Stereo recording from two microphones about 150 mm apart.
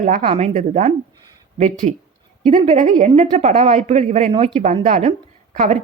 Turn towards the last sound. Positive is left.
turn(degrees=-55)  # may be behind; listen again after turning